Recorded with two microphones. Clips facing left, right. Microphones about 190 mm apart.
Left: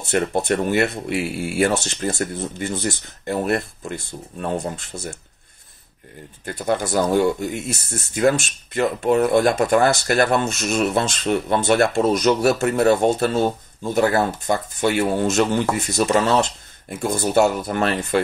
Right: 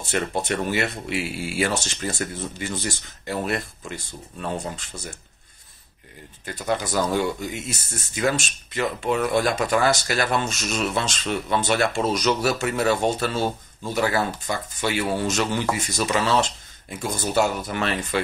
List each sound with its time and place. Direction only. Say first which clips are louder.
0.1 s speech: left 5 dB; 55° left (ahead or behind)
6.4 s speech: left 4 dB; 55° left (ahead or behind)